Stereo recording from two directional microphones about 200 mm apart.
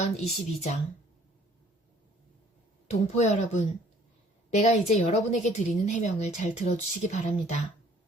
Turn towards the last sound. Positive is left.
turn(degrees=35)  # may be behind; listen again after turning